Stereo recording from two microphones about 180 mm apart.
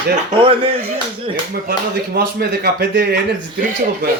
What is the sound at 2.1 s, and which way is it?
A man's voice, 60° right (ahead or behind).